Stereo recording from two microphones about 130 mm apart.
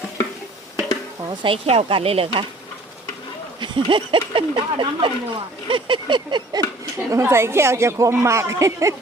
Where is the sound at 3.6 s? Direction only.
40° right (ahead or behind).